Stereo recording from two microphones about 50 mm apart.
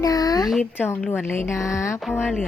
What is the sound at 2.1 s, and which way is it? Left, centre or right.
Speech, centre.